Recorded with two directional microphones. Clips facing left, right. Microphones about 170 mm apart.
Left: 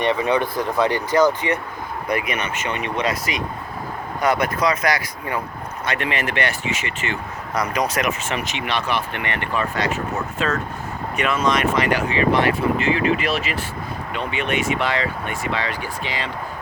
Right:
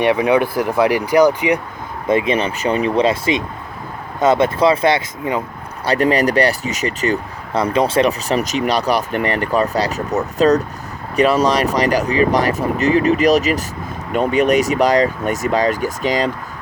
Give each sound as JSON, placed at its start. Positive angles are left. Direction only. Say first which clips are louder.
{"t": 0.0, "sound": "speech", "louder": "right 5 dB", "side_deg": -10}
{"t": 2.0, "sound": "speech", "louder": "right 8 dB", "side_deg": -25}
{"t": 5.8, "sound": "speech", "louder": "right 10 dB", "side_deg": -35}